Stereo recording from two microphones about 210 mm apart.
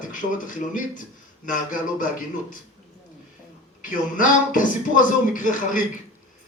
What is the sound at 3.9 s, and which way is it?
Speech, 40° left (ahead or behind).